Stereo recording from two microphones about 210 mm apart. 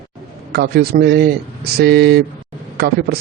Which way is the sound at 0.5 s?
50° right (ahead or behind).